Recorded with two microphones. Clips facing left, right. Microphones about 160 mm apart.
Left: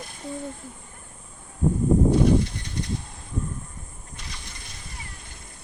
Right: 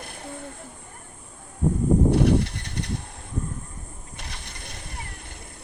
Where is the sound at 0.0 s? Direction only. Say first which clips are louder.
Right 1 dB; 60° right (ahead or behind).